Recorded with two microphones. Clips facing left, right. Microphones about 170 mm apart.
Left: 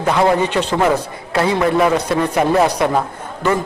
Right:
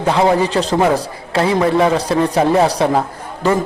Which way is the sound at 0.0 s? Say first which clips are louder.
Right 1 dB; 30° right (ahead or behind).